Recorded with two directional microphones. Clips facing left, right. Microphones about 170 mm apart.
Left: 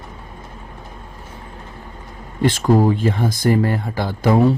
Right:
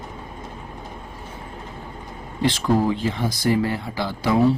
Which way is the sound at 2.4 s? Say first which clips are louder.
Left 4 dB; 50° left (ahead or behind).